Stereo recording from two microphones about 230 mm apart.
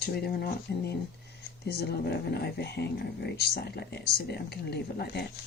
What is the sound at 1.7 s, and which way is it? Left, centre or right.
Speech, left.